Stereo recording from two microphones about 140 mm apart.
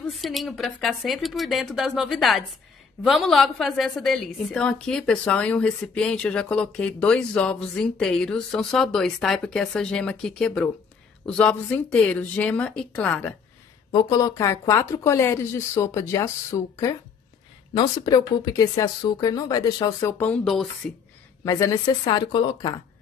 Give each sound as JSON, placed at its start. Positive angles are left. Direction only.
{"t": 0.1, "sound": "a woman's voice", "side_deg": 0}
{"t": 13.9, "sound": "speech", "side_deg": 25}
{"t": 20.2, "sound": "a woman's voice", "side_deg": 10}
{"t": 21.5, "sound": "speech", "side_deg": 25}
{"t": 22.0, "sound": "speech", "side_deg": 35}